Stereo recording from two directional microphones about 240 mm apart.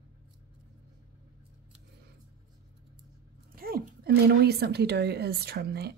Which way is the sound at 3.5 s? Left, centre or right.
Right.